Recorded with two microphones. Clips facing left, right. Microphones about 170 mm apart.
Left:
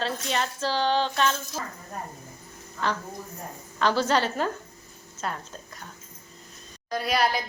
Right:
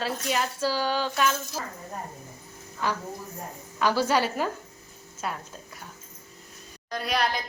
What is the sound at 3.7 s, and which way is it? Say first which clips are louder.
A woman's voice: even; 10° right (ahead or behind).